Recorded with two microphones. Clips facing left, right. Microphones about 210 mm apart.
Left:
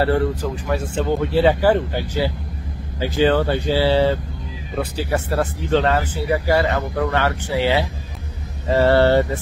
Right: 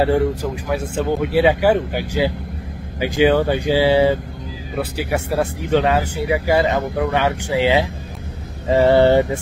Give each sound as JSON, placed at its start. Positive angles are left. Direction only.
{"t": 0.0, "sound": "speech", "side_deg": -15}